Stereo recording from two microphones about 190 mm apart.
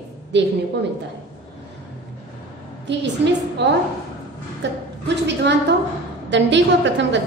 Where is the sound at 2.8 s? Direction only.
65° right (ahead or behind).